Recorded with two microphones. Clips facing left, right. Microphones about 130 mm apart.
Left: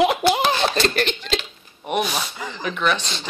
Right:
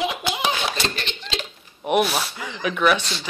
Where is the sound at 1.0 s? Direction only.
50° left (ahead or behind).